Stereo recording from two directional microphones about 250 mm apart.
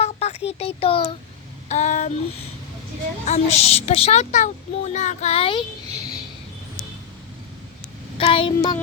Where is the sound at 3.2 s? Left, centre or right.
Left.